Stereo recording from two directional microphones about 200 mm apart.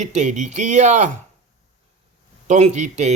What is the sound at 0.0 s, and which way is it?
Speech, 35° right (ahead or behind).